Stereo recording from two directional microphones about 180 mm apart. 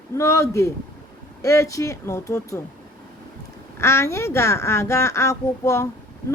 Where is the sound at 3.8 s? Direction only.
15° left (ahead or behind).